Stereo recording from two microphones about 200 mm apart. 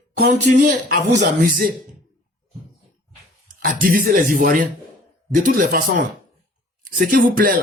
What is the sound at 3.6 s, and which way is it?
A man's voice, 45° right (ahead or behind).